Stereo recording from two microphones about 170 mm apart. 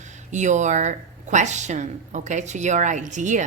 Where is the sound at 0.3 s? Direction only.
45° right (ahead or behind).